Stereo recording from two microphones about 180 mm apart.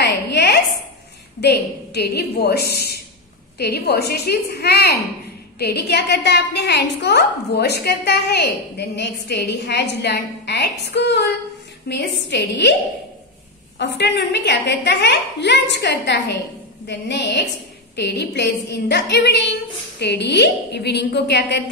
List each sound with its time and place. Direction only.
0.0 s a sound: 70° left (ahead or behind)
1.4 s a woman's voice: 65° left (ahead or behind)
13.7 s a woman's voice: 75° left (ahead or behind)